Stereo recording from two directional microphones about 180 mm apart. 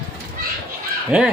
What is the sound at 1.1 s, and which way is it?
Speech, 5° right (ahead or behind).